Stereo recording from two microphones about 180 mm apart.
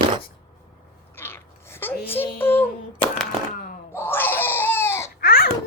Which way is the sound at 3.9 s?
10° left (ahead or behind).